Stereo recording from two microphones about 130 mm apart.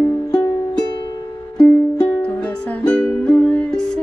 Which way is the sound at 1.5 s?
10° left (ahead or behind).